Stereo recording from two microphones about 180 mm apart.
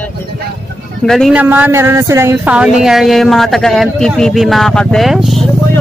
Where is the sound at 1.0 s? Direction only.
Centre (ahead or behind).